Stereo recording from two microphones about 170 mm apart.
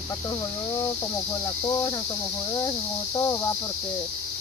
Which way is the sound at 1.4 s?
20° left (ahead or behind).